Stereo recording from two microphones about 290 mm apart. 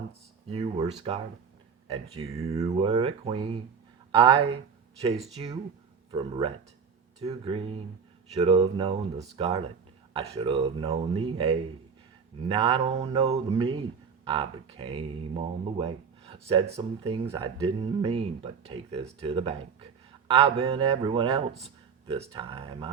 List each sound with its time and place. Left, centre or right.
0.4 s speech: centre